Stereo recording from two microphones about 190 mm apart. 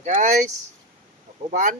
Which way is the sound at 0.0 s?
40° right (ahead or behind).